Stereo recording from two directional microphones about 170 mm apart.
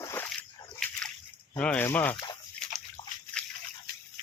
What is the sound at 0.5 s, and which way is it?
Dog, 25° left (ahead or behind).